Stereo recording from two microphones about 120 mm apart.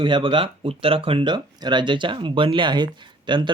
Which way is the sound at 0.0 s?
45° right (ahead or behind).